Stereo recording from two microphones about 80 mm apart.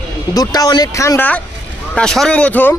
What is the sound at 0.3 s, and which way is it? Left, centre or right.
Speech, left.